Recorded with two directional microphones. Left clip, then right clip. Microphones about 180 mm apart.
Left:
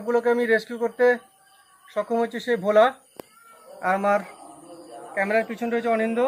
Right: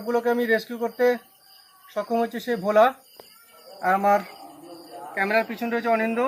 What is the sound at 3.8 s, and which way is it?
Speech, 30° left (ahead or behind).